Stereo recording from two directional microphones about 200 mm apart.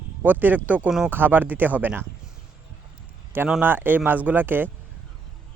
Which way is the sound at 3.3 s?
10° right (ahead or behind).